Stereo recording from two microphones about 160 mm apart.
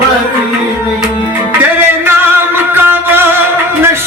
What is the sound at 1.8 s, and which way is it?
Music, 15° right (ahead or behind).